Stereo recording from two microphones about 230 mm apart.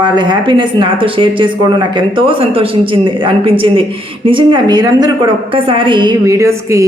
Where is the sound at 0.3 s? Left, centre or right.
Right.